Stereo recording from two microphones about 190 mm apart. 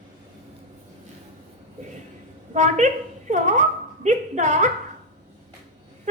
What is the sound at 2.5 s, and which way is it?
A woman's voice, 40° right (ahead or behind).